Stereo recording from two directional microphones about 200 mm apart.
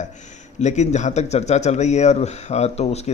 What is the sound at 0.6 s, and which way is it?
Speech, 35° left (ahead or behind).